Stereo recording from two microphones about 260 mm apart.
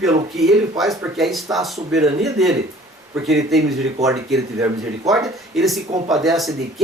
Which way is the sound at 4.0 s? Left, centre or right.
Centre.